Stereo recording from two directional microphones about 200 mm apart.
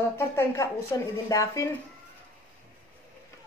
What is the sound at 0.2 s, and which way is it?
A woman's voice, 15° left (ahead or behind).